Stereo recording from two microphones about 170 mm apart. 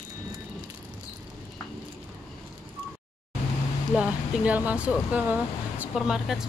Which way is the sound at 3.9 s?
5° right (ahead or behind).